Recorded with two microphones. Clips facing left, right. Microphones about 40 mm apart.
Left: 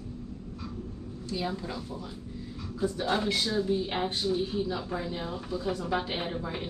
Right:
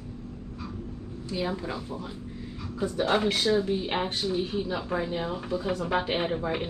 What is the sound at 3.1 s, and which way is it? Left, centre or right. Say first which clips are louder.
Speech: right 6 dB; right.